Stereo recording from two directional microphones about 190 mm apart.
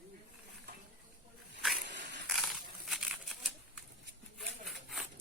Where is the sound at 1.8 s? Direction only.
70° right (ahead or behind).